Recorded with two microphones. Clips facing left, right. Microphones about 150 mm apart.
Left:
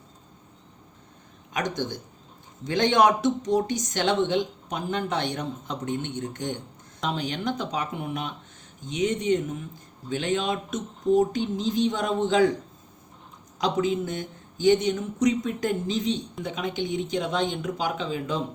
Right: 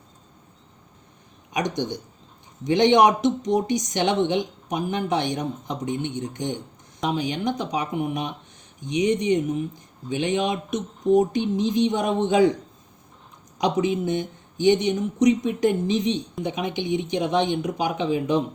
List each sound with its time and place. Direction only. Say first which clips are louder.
1.5 s speech: right 3 dB; 20° right (ahead or behind)
13.6 s speech: right 2 dB; 15° right (ahead or behind)